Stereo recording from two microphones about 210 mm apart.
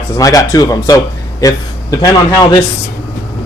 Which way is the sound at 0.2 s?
15° left (ahead or behind).